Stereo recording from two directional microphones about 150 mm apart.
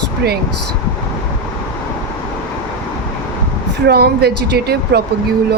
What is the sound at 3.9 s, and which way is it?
Speech, 90° right.